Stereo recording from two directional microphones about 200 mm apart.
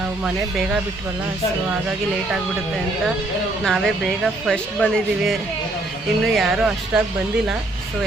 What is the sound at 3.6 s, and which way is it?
Speech, centre (ahead or behind).